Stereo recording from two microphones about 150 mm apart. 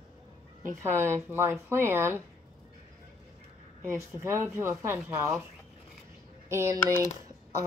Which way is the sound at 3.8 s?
15° right (ahead or behind).